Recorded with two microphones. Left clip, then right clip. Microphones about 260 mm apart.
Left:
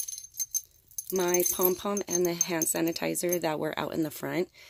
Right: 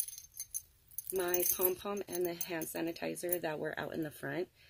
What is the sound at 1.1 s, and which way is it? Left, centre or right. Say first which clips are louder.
Speech: left 8 dB; left.